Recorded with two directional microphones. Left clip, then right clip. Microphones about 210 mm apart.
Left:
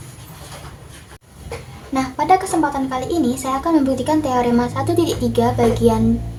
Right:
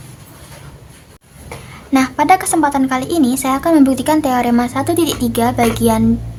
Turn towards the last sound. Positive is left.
turn(degrees=-20)  # may be behind; listen again after turning